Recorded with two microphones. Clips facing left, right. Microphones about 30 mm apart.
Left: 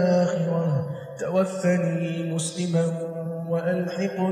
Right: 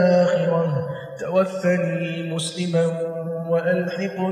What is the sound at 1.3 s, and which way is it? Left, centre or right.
Mantra, centre.